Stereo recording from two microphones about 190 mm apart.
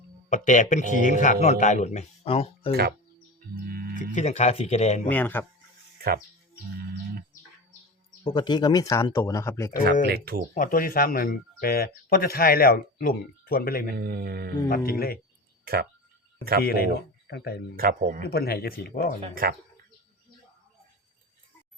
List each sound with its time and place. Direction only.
0.3 s speech: 40° left (ahead or behind)
3.7 s music: 50° right (ahead or behind)
3.9 s speech: 40° left (ahead or behind)
5.0 s speech: 10° left (ahead or behind)
8.2 s speech: 25° left (ahead or behind)
10.1 s speech: 55° right (ahead or behind)
10.5 s speech: 45° left (ahead or behind)
13.9 s speech: 55° right (ahead or behind)
14.8 s speech: 50° left (ahead or behind)
15.6 s speech: 55° right (ahead or behind)
16.6 s speech: 55° left (ahead or behind)
17.7 s speech: 45° right (ahead or behind)
18.3 s speech: 55° left (ahead or behind)
19.3 s speech: 50° right (ahead or behind)